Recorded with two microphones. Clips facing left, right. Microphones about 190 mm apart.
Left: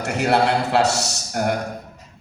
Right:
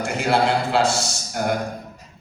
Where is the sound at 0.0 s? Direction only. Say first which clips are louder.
Left 1 dB; 65° left (ahead or behind).